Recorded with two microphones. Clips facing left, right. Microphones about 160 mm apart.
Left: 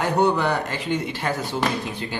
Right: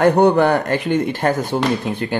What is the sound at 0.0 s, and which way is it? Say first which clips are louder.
Speech: right 8 dB; 55° right (ahead or behind).